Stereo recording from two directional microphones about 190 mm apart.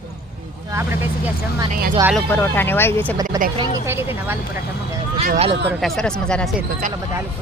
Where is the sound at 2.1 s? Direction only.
10° left (ahead or behind).